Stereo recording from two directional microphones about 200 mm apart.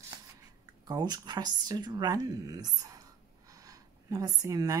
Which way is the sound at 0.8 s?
20° right (ahead or behind).